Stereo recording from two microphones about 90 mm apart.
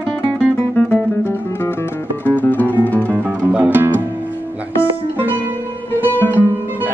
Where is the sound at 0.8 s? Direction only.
20° left (ahead or behind).